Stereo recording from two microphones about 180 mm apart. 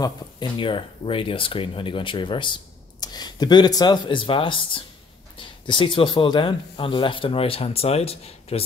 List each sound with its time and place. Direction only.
0.0 s speech: 25° left (ahead or behind)